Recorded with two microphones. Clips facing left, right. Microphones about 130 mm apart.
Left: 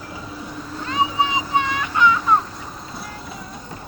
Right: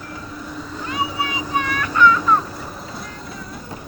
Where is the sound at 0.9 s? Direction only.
20° left (ahead or behind).